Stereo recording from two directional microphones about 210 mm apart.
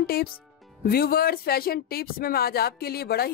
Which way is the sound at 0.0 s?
45° left (ahead or behind).